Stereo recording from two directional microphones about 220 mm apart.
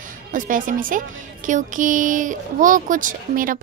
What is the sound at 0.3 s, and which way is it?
Speech, 35° right (ahead or behind).